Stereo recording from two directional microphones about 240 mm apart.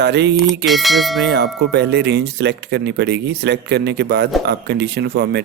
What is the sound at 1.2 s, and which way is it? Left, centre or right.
Speech, right.